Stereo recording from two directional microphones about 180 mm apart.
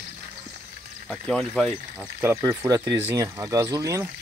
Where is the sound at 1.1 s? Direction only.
Centre (ahead or behind).